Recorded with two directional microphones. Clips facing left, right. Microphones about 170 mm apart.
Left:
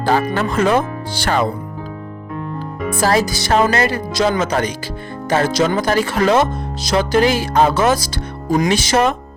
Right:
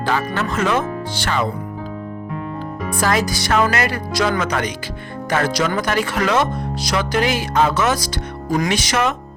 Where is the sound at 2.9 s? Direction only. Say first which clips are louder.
Left 3 dB; 30° left (ahead or behind).